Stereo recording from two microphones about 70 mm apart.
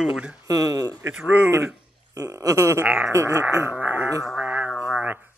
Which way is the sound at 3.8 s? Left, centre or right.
Right.